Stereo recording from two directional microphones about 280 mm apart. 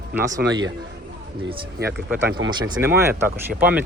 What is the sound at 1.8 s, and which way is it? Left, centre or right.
Speech, centre.